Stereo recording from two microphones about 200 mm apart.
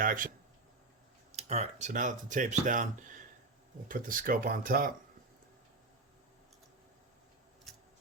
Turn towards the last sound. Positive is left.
turn(degrees=0)  # may be behind; listen again after turning